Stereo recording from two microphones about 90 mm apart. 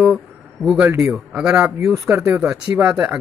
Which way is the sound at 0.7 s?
10° right (ahead or behind).